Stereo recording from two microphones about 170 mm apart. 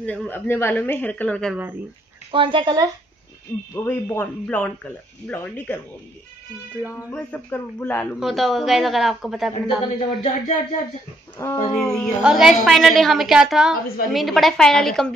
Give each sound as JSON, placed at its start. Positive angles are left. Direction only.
{"t": 0.0, "sound": "speech", "side_deg": 5}
{"t": 1.5, "sound": "speech", "side_deg": -10}
{"t": 2.3, "sound": "a woman's voice", "side_deg": -30}
{"t": 3.7, "sound": "speech", "side_deg": 15}
{"t": 7.1, "sound": "speech", "side_deg": 10}
{"t": 8.2, "sound": "a woman's voice", "side_deg": 0}
{"t": 9.9, "sound": "speech", "side_deg": 40}
{"t": 11.3, "sound": "speech", "side_deg": 15}
{"t": 11.9, "sound": "a woman's voice", "side_deg": 0}